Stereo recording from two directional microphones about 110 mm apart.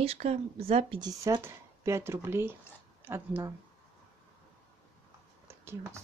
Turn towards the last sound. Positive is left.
turn(degrees=-25)  # may be behind; listen again after turning